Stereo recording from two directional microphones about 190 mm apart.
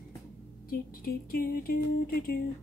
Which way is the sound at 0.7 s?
50° left (ahead or behind).